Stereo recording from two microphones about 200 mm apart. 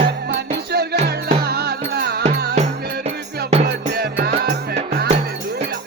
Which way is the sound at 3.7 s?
50° right (ahead or behind).